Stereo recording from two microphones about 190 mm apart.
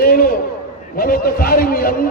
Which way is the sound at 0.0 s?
50° left (ahead or behind).